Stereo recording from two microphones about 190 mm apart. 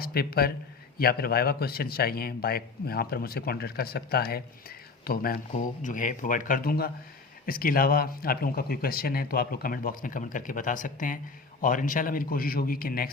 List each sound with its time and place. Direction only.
0.0 s speech: 55° left (ahead or behind)